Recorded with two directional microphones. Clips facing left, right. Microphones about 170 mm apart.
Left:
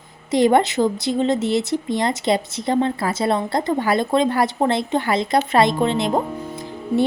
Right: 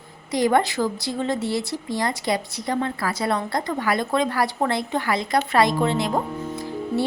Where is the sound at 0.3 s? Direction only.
25° left (ahead or behind).